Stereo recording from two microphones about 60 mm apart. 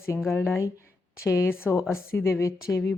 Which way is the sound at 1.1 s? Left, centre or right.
Left.